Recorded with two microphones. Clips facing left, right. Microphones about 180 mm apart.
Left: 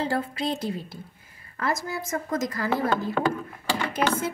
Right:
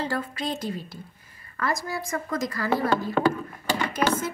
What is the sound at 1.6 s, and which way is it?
A woman's voice, 25° left (ahead or behind).